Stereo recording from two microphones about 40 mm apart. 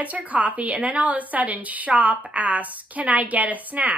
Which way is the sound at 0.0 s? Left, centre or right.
Right.